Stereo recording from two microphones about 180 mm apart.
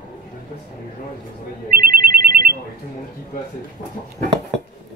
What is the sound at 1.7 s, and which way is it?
Ringtone, 55° right (ahead or behind).